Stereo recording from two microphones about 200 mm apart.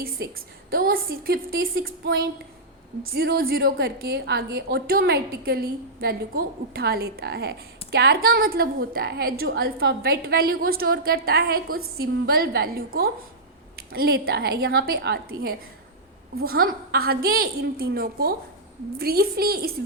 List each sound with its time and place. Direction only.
0.0 s a woman's voice: 50° right (ahead or behind)